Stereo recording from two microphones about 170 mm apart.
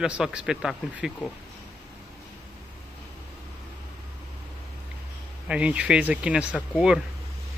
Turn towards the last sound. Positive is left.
turn(degrees=-5)  # may be behind; listen again after turning